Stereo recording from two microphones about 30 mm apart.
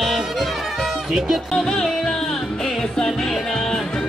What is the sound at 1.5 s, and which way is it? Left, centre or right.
Speech, centre.